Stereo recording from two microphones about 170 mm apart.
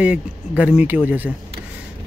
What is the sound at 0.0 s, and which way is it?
Speech, 5° right (ahead or behind).